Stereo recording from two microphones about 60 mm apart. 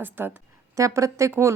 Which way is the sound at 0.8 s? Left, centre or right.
Right.